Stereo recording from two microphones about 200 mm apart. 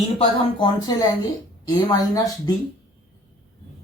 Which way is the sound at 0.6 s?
20° left (ahead or behind).